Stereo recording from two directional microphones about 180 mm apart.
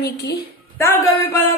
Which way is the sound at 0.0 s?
60° left (ahead or behind).